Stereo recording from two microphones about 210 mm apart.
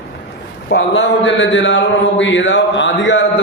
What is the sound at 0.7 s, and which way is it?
A man's voice, 55° left (ahead or behind).